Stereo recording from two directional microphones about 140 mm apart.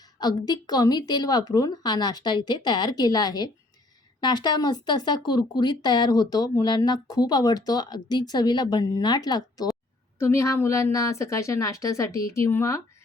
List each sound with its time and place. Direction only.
0.2 s speech: 30° left (ahead or behind)